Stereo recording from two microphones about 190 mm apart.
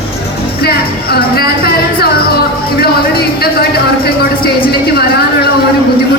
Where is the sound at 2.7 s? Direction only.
55° left (ahead or behind).